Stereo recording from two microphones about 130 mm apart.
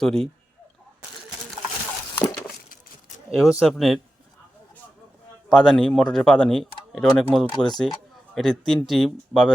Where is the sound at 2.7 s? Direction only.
90° left.